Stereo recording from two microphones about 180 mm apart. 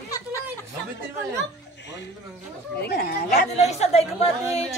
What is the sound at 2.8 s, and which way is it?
Speech, 55° left (ahead or behind).